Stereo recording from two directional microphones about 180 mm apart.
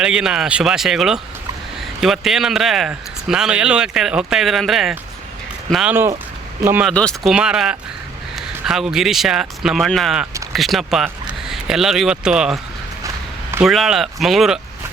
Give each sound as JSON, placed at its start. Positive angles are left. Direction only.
{"t": 0.0, "sound": "speech", "side_deg": -5}
{"t": 6.8, "sound": "speech", "side_deg": 5}
{"t": 13.7, "sound": "speech", "side_deg": 0}